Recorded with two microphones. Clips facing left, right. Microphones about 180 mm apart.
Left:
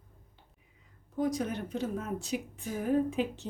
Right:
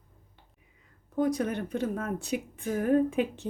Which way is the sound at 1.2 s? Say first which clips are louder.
Right 4 dB; 60° right (ahead or behind).